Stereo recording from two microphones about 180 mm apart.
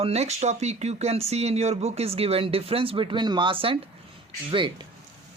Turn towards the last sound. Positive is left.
turn(degrees=-30)  # may be behind; listen again after turning